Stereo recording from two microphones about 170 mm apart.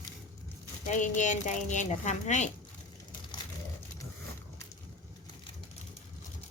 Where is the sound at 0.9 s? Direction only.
45° left (ahead or behind).